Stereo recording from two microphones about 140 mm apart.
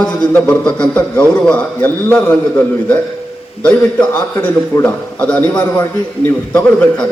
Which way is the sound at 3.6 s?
5° left (ahead or behind).